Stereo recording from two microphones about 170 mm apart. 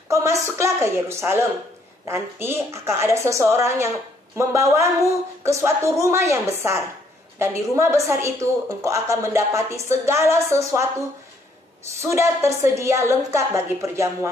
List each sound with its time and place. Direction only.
0.1 s speech: 15° right (ahead or behind)
12.0 s speech: 15° right (ahead or behind)